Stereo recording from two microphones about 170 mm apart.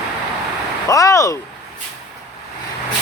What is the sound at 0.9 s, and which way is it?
Speech, 20° left (ahead or behind).